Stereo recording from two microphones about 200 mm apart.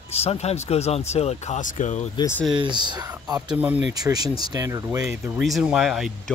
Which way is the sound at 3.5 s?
5° right (ahead or behind).